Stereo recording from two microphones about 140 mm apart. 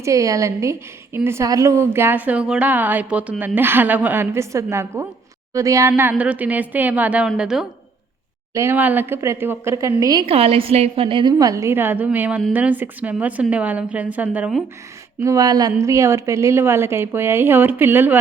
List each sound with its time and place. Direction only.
0.0 s a woman's voice: 25° right (ahead or behind); by 7.7 s 5° right (ahead or behind)
8.5 s a woman's voice: 15° right (ahead or behind)
10.2 s a woman's voice: 40° right (ahead or behind); by 14.5 s 10° right (ahead or behind)
15.2 s a woman's voice: 25° right (ahead or behind)